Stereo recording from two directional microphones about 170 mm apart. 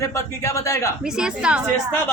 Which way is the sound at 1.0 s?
5° right (ahead or behind).